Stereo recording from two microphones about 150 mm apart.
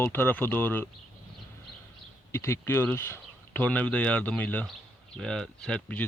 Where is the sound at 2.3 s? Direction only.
20° left (ahead or behind).